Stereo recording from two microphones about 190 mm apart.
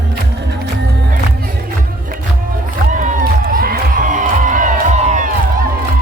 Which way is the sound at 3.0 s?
45° right (ahead or behind).